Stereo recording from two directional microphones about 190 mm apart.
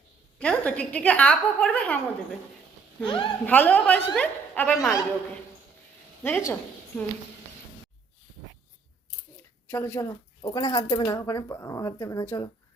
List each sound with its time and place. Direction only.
0.3 s a woman's voice: 5° left (ahead or behind)
3.0 s speech: 25° left (ahead or behind)
3.4 s a woman's voice: 10° left (ahead or behind)
6.2 s a woman's voice: 10° left (ahead or behind)
9.6 s a woman's voice: 10° left (ahead or behind)